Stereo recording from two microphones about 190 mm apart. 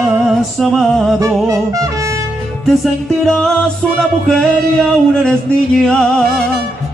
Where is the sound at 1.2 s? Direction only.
15° right (ahead or behind).